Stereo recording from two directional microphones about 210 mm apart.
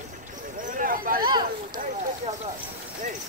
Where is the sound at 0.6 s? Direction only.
40° right (ahead or behind).